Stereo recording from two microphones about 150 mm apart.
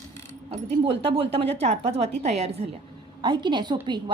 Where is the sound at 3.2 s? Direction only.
30° right (ahead or behind).